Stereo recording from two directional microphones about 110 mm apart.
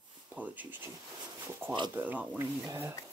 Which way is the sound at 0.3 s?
15° right (ahead or behind).